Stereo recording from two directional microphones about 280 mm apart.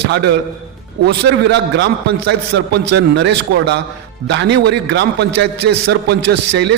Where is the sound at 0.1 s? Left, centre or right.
Right.